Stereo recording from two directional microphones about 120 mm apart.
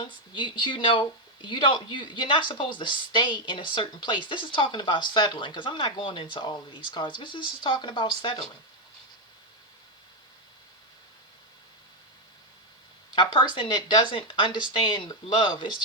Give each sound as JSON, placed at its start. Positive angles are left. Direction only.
{"t": 0.0, "sound": "speech", "side_deg": 45}
{"t": 13.1, "sound": "speech", "side_deg": 40}